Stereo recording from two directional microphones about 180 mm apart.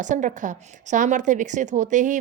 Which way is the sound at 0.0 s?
45° right (ahead or behind).